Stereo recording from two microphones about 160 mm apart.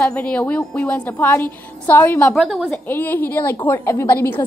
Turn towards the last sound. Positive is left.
turn(degrees=10)  # may be behind; listen again after turning